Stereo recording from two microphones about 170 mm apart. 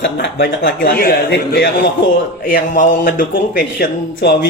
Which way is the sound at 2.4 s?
55° left (ahead or behind).